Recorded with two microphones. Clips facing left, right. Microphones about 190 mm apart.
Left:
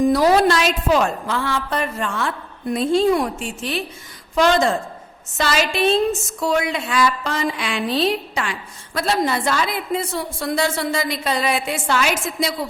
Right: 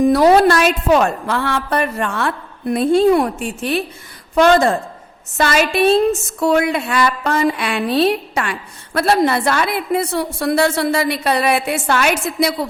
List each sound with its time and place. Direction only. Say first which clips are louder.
0.0 s a woman's voice: right 4 dB; 60° right (ahead or behind)